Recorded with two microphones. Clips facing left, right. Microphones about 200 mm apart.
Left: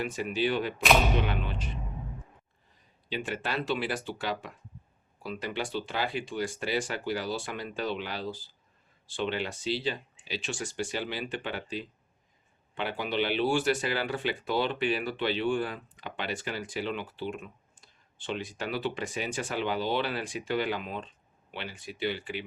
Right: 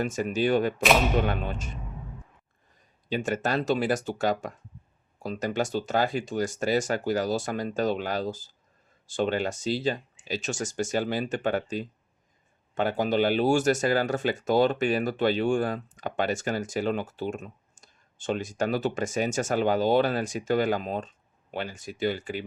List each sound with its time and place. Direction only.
0.0 s speech: 45° right (ahead or behind)
3.1 s speech: 45° right (ahead or behind)